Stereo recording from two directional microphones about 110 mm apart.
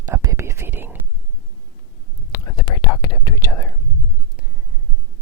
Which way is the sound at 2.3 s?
30° left (ahead or behind).